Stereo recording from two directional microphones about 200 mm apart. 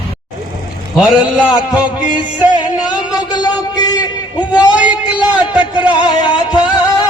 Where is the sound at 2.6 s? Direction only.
20° left (ahead or behind).